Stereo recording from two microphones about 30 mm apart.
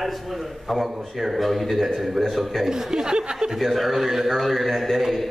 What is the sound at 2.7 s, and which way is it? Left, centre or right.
Speech, right.